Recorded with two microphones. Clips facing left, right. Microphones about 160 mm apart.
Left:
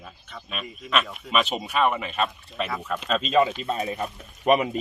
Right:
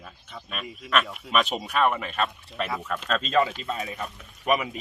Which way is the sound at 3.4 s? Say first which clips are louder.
Left 3 dB; 20° left (ahead or behind).